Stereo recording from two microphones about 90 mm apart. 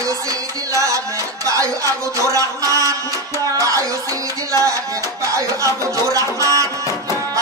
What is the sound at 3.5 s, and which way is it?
Music, 40° right (ahead or behind).